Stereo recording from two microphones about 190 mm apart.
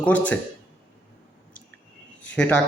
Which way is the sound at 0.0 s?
10° left (ahead or behind).